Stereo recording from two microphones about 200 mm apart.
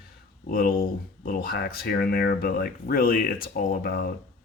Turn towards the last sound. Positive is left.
turn(degrees=50)  # may be behind; listen again after turning